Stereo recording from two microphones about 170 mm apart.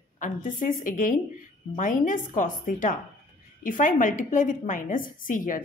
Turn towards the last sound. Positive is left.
turn(degrees=50)  # may be behind; listen again after turning